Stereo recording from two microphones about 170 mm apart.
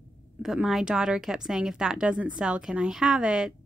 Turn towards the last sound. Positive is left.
turn(degrees=-5)  # may be behind; listen again after turning